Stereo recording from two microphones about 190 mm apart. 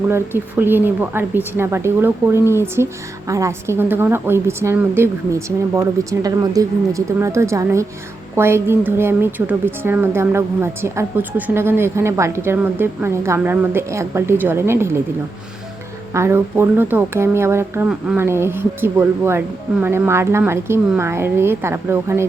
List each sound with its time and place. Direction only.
0.1 s a woman's voice: 10° right (ahead or behind)
16.1 s a woman's voice: 15° right (ahead or behind)